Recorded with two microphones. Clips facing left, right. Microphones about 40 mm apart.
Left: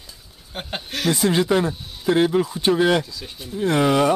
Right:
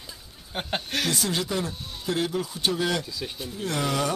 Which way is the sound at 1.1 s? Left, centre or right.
Left.